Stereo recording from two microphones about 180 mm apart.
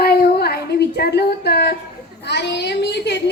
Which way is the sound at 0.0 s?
60° left (ahead or behind).